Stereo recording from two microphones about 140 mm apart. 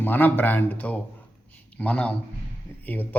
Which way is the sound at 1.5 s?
10° left (ahead or behind).